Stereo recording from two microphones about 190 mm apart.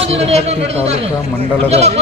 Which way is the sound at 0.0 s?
35° right (ahead or behind).